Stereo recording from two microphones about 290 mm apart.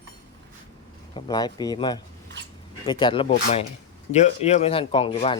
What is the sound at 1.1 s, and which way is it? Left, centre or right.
Speech, centre.